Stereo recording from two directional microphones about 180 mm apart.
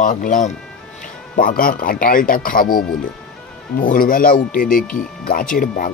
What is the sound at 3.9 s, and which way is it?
Speech, 50° left (ahead or behind).